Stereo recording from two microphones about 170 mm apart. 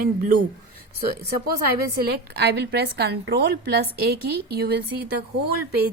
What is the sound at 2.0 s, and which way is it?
A woman's voice, 70° right (ahead or behind).